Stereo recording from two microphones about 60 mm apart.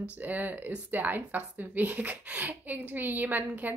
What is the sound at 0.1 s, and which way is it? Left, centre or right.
A woman's voice, right.